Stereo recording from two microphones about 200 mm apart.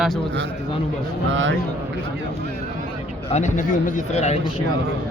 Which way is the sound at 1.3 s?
70° right (ahead or behind).